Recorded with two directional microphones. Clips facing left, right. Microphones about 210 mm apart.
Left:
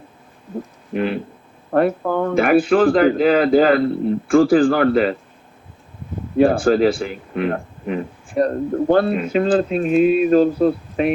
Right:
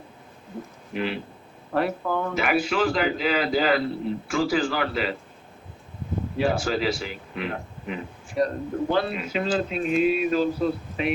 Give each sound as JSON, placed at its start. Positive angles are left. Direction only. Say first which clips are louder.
{"t": 0.9, "sound": "speech", "louder": "left 7 dB", "side_deg": 50}
{"t": 6.3, "sound": "speech", "louder": "left 10 dB", "side_deg": 50}